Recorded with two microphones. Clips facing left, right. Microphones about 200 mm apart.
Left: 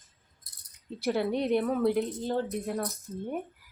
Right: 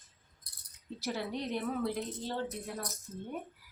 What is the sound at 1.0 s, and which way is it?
Speech, 60° left (ahead or behind).